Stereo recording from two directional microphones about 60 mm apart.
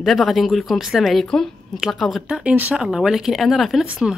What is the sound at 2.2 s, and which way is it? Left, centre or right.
Speech, centre.